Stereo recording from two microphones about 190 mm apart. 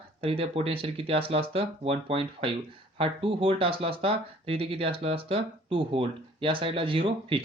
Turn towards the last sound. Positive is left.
turn(degrees=-30)  # may be behind; listen again after turning